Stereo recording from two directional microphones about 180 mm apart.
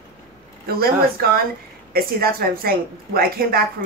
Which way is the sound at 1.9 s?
55° right (ahead or behind).